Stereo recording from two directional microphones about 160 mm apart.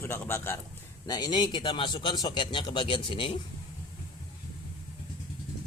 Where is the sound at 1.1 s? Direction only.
25° left (ahead or behind).